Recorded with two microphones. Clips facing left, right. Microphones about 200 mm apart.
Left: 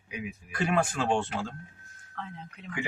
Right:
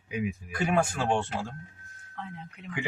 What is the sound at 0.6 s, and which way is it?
Speech, 10° right (ahead or behind).